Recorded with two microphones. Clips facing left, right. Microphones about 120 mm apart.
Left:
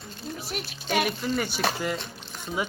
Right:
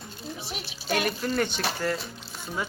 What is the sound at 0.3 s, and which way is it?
Speech, centre (ahead or behind).